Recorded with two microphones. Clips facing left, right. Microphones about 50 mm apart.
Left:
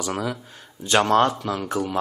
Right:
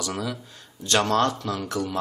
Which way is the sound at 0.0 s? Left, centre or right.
Left.